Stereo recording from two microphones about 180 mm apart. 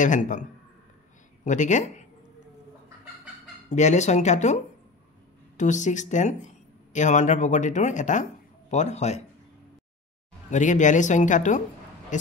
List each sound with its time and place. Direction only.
0.0 s speech: 45° left (ahead or behind)
3.6 s speech: 40° left (ahead or behind)
5.6 s speech: 40° left (ahead or behind)
10.5 s speech: 45° left (ahead or behind)
12.1 s a sound: 45° left (ahead or behind)